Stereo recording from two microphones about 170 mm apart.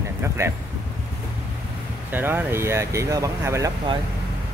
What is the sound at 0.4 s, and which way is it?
Speech, 15° right (ahead or behind).